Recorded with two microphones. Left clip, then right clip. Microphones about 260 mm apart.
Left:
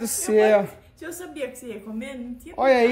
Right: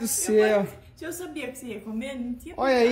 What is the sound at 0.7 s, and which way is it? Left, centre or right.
A woman's voice, centre.